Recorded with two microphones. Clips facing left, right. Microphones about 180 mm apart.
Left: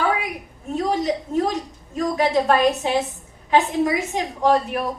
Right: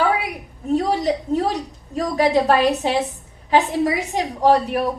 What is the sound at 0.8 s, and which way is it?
A woman's voice, 40° right (ahead or behind).